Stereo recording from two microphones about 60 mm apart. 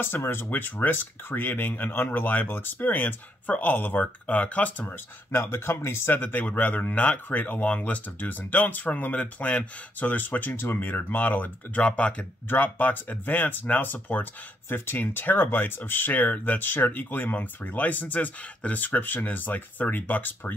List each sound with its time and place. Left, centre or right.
0.0 s speech: left
5.3 s speech: left
12.4 s speech: left